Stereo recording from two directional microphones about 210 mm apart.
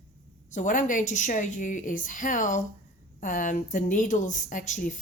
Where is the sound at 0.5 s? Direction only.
40° left (ahead or behind).